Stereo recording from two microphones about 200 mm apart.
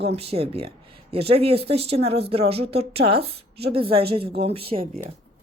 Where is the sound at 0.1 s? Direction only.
30° right (ahead or behind).